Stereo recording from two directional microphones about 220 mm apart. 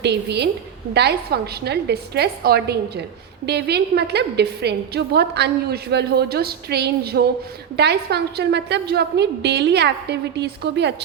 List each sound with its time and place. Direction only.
0.0 s a woman's voice: 50° right (ahead or behind)